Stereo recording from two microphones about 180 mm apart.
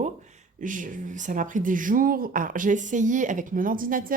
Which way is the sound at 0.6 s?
45° right (ahead or behind).